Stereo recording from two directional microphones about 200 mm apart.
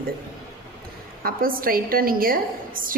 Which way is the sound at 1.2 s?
45° right (ahead or behind).